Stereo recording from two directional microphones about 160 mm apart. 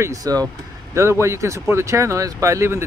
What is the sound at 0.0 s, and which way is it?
Speech, 20° right (ahead or behind).